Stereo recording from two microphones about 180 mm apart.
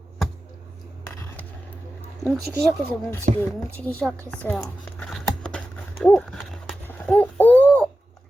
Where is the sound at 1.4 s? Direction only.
10° left (ahead or behind).